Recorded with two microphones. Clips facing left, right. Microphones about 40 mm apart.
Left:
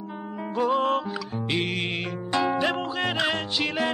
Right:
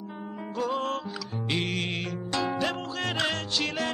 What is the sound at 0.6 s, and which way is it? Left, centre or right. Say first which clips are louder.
Music: left 6 dB; left.